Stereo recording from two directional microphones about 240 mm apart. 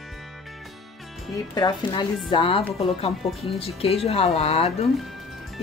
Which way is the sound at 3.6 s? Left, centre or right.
Left.